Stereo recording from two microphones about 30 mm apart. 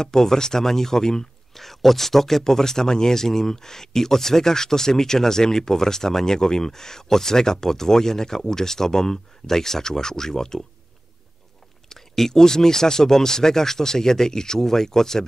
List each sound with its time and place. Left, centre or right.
0.0 s speech: centre
1.6 s speech: centre
11.9 s speech: centre